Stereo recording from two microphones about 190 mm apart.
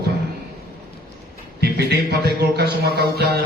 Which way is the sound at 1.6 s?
60° right (ahead or behind).